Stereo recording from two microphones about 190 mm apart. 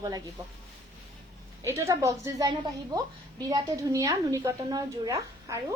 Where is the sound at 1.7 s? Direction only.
15° right (ahead or behind).